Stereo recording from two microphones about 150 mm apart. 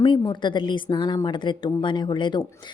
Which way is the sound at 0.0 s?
30° left (ahead or behind).